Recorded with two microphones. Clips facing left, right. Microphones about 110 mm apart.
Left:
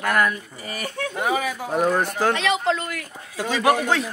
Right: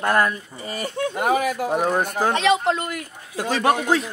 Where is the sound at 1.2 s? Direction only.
55° right (ahead or behind).